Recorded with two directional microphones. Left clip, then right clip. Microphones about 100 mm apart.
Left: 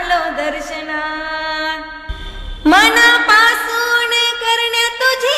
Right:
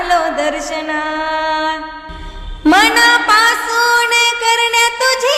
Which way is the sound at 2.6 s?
20° right (ahead or behind).